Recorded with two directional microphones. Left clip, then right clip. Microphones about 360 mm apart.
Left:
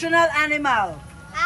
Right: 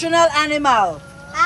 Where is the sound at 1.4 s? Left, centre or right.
Right.